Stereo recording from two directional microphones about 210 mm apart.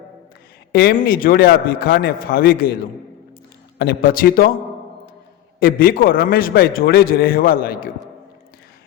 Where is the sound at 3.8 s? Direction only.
45° left (ahead or behind).